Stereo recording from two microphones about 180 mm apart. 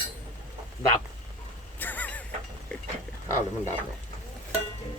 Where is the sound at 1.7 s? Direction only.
10° left (ahead or behind).